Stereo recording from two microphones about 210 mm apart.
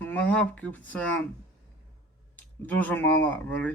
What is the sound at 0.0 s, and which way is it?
A man's voice, 5° left (ahead or behind).